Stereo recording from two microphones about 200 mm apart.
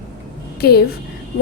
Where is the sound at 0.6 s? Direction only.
50° left (ahead or behind).